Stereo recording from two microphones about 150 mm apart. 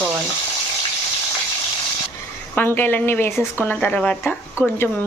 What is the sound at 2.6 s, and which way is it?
A woman's voice, 15° left (ahead or behind).